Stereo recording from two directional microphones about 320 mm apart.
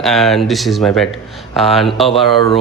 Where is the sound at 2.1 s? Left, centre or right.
Centre.